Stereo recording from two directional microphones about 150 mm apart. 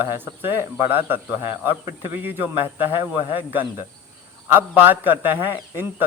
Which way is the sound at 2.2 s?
15° right (ahead or behind).